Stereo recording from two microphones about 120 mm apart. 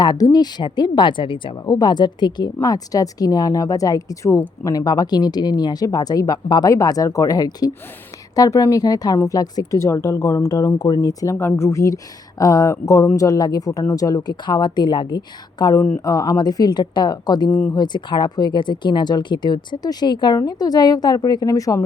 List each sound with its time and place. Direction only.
0.0 s a woman's voice: 35° left (ahead or behind)
1.6 s a woman's voice: 30° left (ahead or behind)